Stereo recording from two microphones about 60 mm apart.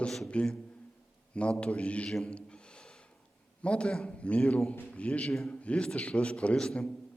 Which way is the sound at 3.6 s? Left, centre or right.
Centre.